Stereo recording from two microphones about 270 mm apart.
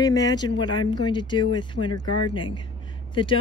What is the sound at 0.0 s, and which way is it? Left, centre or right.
A woman's voice, centre.